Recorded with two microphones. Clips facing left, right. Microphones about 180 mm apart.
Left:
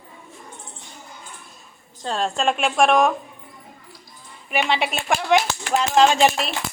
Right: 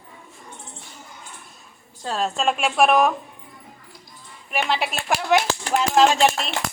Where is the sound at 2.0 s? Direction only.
5° right (ahead or behind).